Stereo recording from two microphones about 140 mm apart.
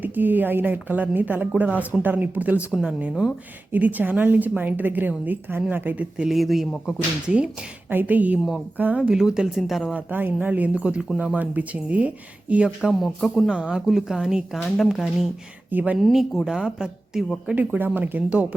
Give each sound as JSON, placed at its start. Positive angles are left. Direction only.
{"t": 0.0, "sound": "a woman's voice", "side_deg": -15}
{"t": 10.1, "sound": "a woman's voice", "side_deg": -15}
{"t": 16.0, "sound": "a woman's voice", "side_deg": 0}